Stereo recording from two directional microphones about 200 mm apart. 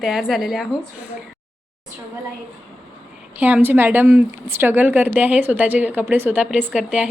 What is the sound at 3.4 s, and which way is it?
Speech, 10° right (ahead or behind).